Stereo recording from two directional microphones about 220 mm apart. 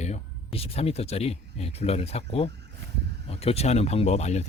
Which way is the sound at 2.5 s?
50° right (ahead or behind).